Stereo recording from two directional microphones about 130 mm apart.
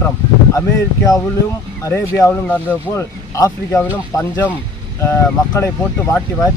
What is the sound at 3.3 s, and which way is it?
Speech, 25° left (ahead or behind).